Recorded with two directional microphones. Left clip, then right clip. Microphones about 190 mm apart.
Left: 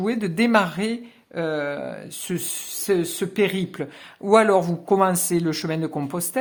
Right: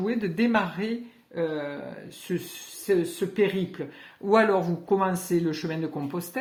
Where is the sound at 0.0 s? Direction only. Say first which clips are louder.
Left 4 dB; 40° left (ahead or behind).